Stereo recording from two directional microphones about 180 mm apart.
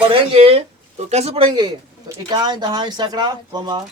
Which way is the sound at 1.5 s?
20° right (ahead or behind).